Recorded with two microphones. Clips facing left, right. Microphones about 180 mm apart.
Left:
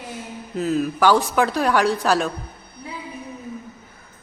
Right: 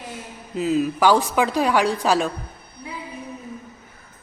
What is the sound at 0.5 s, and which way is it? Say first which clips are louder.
Speech: right 1 dB; 5° right (ahead or behind).